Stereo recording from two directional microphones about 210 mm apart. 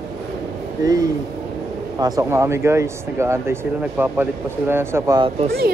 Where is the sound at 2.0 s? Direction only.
15° right (ahead or behind).